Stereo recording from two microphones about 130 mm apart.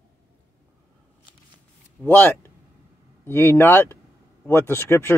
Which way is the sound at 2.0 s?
15° left (ahead or behind).